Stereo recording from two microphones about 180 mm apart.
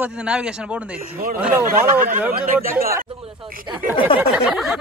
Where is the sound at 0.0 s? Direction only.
5° right (ahead or behind).